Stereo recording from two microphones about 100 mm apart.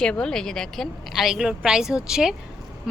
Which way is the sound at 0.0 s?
5° left (ahead or behind).